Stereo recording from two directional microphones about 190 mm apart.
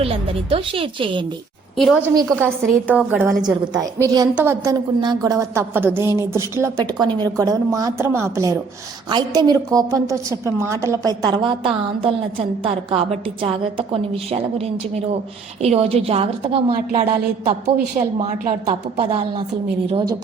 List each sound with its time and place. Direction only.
0.5 s a woman's voice: 30° right (ahead or behind)
1.7 s a woman's voice: centre (ahead or behind); by 20.1 s 25° right (ahead or behind)